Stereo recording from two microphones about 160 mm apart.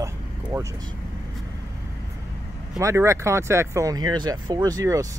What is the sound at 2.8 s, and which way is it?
Speech, 20° right (ahead or behind).